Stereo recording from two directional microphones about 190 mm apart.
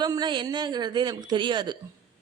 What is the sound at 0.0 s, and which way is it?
Speech, 20° right (ahead or behind).